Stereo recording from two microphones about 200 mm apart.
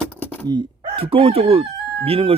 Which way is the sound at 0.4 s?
20° right (ahead or behind).